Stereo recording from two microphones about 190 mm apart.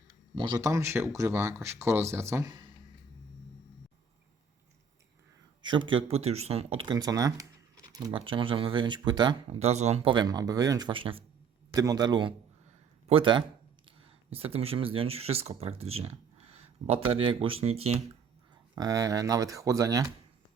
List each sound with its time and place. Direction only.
0.3 s speech: 20° right (ahead or behind)
5.6 s speech: 25° right (ahead or behind)
18.7 s speech: 20° right (ahead or behind)